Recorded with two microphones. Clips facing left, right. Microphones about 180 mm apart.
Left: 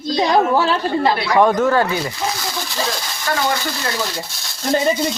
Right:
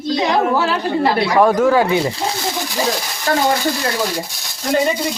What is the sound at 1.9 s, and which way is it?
Speech, 25° right (ahead or behind).